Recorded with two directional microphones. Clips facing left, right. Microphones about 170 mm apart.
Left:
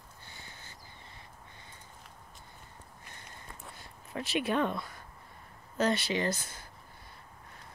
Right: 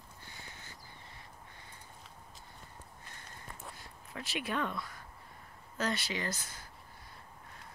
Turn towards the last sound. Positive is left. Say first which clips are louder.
# left 7 dB
turn(degrees=25)  # may be behind; listen again after turning